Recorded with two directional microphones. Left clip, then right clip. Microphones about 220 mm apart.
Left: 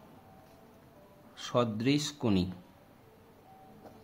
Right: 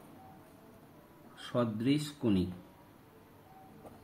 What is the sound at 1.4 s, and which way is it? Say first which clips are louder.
Speech: left 4 dB; 50° left (ahead or behind).